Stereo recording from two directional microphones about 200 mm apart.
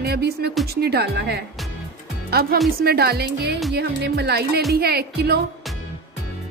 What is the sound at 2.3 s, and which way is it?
Speech, 50° right (ahead or behind).